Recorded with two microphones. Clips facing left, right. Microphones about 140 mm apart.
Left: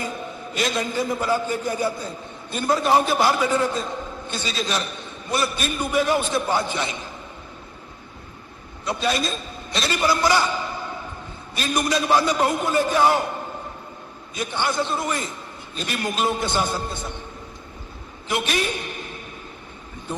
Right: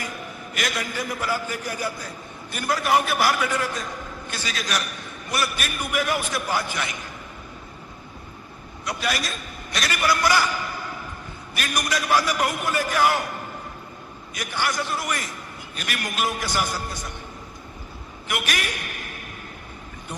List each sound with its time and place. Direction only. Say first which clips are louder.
0.0 s a man's voice: left 4 dB; 25° left (ahead or behind)
8.8 s a man's voice: left 4 dB; 25° left (ahead or behind)
18.3 s a man's voice: left 4 dB; 25° left (ahead or behind)